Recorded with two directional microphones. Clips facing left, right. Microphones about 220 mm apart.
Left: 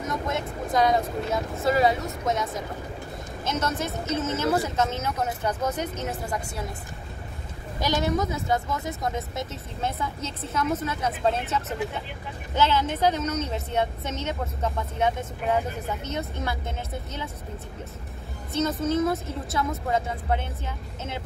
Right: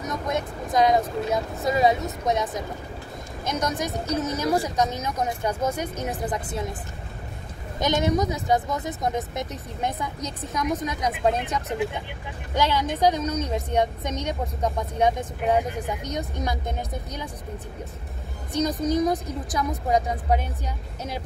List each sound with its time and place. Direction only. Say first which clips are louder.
0.0 s vehicle: right 1 dB; 20° right (ahead or behind)
0.7 s speech: right 2 dB; 20° right (ahead or behind)
3.4 s a woman's voice: right 1 dB; 15° right (ahead or behind)
7.8 s a woman's voice: right 3 dB; 20° right (ahead or behind)
18.5 s a woman's voice: right 1 dB; 15° right (ahead or behind)